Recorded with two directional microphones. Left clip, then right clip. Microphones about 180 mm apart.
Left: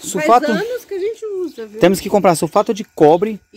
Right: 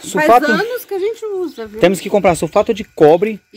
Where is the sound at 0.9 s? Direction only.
30° right (ahead or behind).